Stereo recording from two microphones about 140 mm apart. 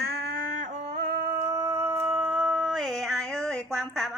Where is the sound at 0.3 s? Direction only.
65° right (ahead or behind).